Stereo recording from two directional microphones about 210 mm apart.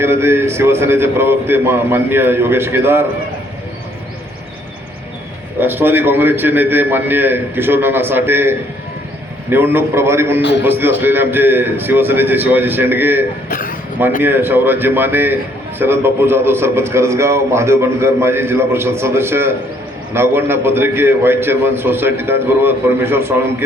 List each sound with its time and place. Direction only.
0.0 s a man's voice: 10° right (ahead or behind)
5.5 s a man's voice: 10° right (ahead or behind)
13.5 s a man's voice: 40° left (ahead or behind)
14.2 s a man's voice: 10° right (ahead or behind)